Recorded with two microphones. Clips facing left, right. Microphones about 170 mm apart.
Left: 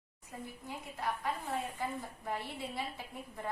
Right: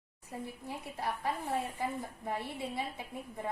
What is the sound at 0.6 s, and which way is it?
Speech, 30° right (ahead or behind).